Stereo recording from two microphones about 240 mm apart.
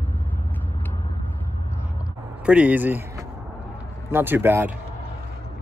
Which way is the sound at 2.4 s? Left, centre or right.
Centre.